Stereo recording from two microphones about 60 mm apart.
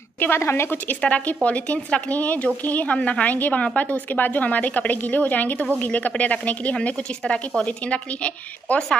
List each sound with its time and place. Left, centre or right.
0.4 s speech: left
1.0 s a woman's voice: left